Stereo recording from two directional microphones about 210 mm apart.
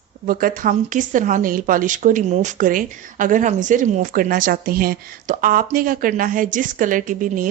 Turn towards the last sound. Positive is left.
turn(degrees=-40)  # may be behind; listen again after turning